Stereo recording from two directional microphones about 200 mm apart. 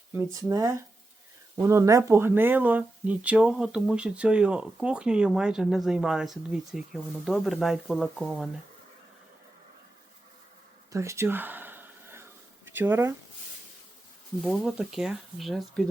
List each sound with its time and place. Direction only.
0.3 s speech: 15° right (ahead or behind)
10.9 s a sound: 15° right (ahead or behind)
12.6 s speech: 10° right (ahead or behind)
14.4 s speech: centre (ahead or behind)